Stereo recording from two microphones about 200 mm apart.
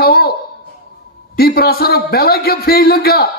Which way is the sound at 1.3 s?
50° left (ahead or behind).